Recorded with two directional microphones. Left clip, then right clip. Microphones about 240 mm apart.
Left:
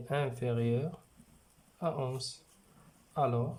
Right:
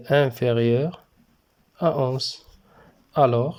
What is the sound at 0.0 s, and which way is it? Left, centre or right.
Speech, right.